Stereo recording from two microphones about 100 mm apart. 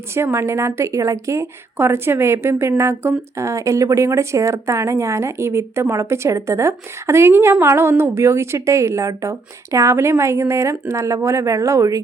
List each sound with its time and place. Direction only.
0.1 s a woman's voice: 25° right (ahead or behind)